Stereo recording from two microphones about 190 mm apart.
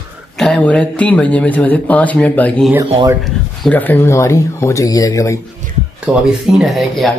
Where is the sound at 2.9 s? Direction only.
25° right (ahead or behind).